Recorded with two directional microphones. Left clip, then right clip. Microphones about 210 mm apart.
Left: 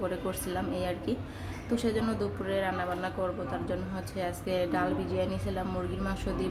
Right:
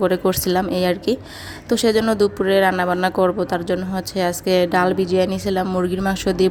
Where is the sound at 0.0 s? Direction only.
40° right (ahead or behind).